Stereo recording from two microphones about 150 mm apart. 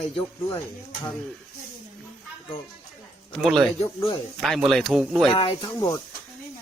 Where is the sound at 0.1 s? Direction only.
35° left (ahead or behind).